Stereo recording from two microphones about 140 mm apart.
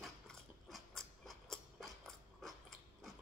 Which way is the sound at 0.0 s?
Centre (ahead or behind).